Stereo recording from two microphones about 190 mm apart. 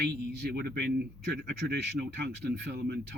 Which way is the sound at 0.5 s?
55° right (ahead or behind).